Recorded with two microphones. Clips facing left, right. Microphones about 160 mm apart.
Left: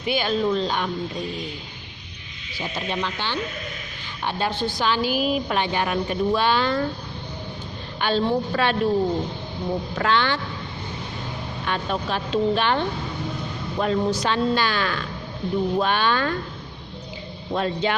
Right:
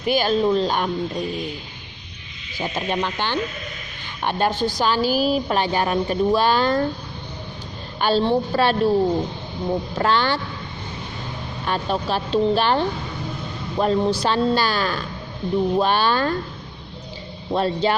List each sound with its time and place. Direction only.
0.0 s speech: 40° right (ahead or behind)
2.6 s a woman's voice: 50° right (ahead or behind)
7.9 s a woman's voice: 40° right (ahead or behind)
9.9 s a woman's voice: 40° right (ahead or behind)
11.6 s a woman's voice: 35° right (ahead or behind)
17.5 s a woman's voice: 35° right (ahead or behind)